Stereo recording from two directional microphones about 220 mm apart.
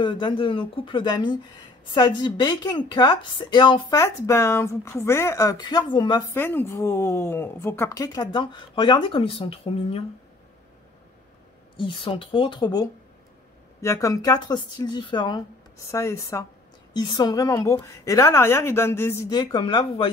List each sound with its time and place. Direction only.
0.0 s a woman's voice: 20° left (ahead or behind)
6.3 s speech: 10° left (ahead or behind); by 10.0 s 25° left (ahead or behind)
11.7 s a woman's voice: 25° left (ahead or behind)